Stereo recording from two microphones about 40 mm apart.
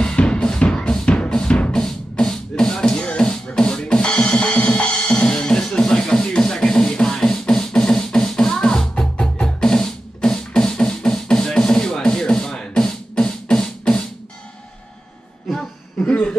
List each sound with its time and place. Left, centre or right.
0.0 s drum: left
1.5 s music: left
1.8 s music: centre
7.2 s beatboxing: centre
9.2 s music: centre
16.0 s music: left